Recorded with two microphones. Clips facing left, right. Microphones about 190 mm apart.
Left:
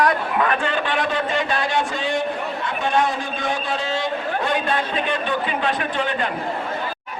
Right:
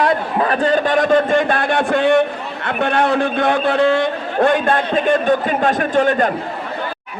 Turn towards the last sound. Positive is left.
turn(degrees=-45)  # may be behind; listen again after turning